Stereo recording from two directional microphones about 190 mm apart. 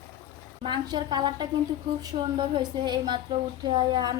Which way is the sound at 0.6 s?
20° right (ahead or behind).